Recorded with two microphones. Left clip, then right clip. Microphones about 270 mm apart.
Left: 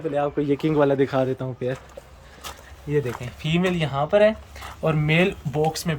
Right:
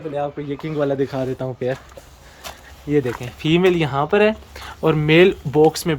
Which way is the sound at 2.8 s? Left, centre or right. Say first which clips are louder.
Right 5 dB; centre.